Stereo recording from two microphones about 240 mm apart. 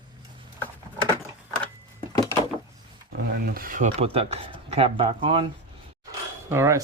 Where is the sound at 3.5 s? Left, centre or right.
Right.